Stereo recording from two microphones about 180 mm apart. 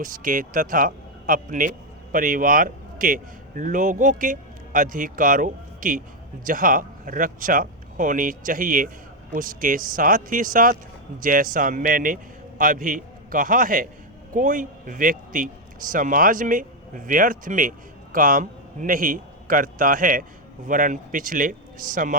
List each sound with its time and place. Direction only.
0.0 s a man's voice: 45° right (ahead or behind)